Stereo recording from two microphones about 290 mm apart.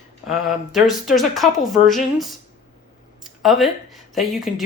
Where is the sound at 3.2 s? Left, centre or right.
Centre.